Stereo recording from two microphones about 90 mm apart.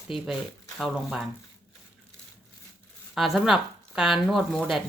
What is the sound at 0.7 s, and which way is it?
Speech, 10° right (ahead or behind).